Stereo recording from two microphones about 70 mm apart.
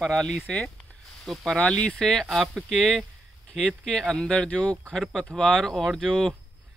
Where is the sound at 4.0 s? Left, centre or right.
Centre.